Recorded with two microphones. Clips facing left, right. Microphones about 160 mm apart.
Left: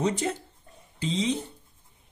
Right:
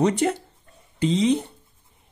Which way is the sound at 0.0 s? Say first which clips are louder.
Right 6 dB; 70° right (ahead or behind).